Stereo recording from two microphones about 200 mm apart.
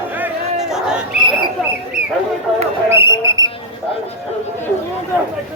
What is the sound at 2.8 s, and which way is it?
Speech, 15° right (ahead or behind).